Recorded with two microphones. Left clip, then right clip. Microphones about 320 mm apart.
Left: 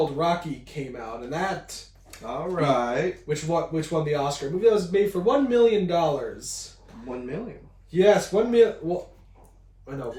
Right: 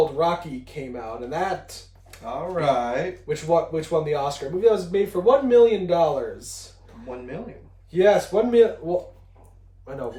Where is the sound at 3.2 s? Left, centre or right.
Centre.